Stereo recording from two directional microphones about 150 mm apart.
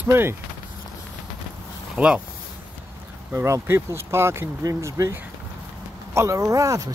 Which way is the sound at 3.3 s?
15° right (ahead or behind).